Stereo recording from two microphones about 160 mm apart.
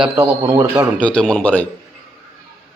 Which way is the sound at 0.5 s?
20° right (ahead or behind).